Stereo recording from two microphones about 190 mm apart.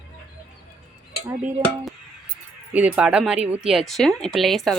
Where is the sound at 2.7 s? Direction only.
5° right (ahead or behind).